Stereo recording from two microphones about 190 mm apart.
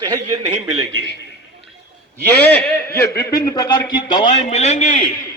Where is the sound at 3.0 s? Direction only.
15° left (ahead or behind); by 5.1 s 40° left (ahead or behind).